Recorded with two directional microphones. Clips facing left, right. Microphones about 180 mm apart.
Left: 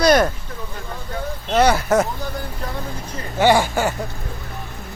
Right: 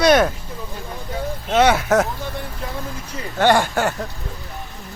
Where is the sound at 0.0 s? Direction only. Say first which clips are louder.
Even; centre (ahead or behind).